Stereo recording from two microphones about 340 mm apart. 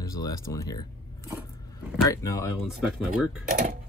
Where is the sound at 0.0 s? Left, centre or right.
Centre.